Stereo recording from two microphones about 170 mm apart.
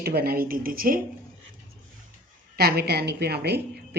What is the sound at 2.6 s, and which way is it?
A woman's voice, 65° right (ahead or behind).